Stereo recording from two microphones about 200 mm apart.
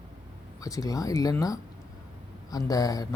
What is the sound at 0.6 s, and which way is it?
Speech, 15° left (ahead or behind).